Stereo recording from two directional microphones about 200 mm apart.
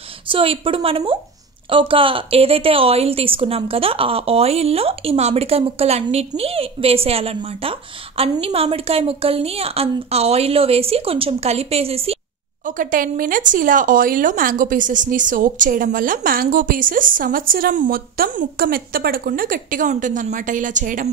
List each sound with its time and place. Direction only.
0.3 s a woman's voice: 25° right (ahead or behind)
12.6 s speech: 40° right (ahead or behind)